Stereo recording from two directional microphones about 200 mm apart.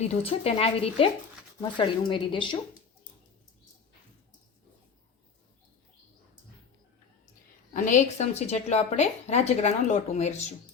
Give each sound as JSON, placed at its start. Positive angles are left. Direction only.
{"t": 0.0, "sound": "a woman's voice", "side_deg": 30}
{"t": 7.7, "sound": "a woman's voice", "side_deg": 40}